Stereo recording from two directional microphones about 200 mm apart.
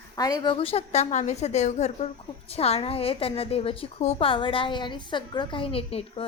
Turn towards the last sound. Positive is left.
turn(degrees=25)  # may be behind; listen again after turning